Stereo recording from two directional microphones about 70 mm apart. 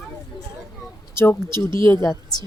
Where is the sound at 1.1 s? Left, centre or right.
Left.